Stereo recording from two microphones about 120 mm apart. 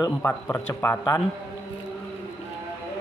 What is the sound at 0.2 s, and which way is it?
Speech, 15° left (ahead or behind).